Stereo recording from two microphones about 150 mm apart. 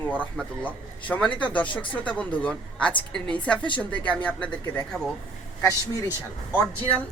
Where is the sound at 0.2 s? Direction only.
10° left (ahead or behind).